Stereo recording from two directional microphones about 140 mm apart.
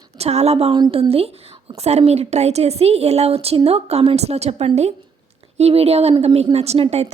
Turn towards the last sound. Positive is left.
turn(degrees=-50)  # may be behind; listen again after turning